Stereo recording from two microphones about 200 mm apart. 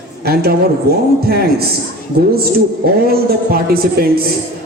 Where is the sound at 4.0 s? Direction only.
50° right (ahead or behind).